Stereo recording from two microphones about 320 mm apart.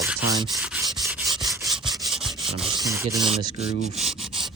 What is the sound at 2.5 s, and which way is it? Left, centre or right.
Speech, centre.